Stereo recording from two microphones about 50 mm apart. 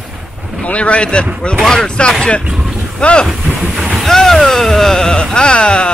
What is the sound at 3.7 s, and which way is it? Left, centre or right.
Speech, centre.